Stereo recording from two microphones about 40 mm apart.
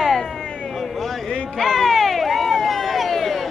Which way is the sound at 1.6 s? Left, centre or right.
Centre.